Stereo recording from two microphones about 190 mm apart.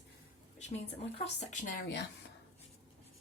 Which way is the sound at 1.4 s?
40° left (ahead or behind).